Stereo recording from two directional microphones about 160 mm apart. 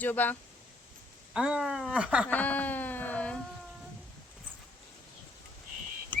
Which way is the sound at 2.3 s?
10° left (ahead or behind).